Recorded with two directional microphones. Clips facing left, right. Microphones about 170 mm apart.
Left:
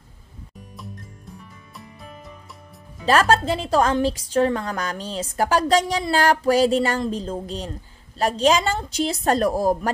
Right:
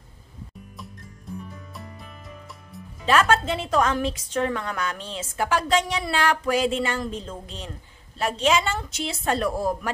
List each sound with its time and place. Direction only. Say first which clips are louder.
3.1 s a woman's voice: left 3 dB; 35° left (ahead or behind)